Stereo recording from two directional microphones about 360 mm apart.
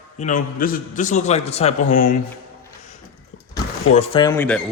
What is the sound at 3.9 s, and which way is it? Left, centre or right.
Speech, centre.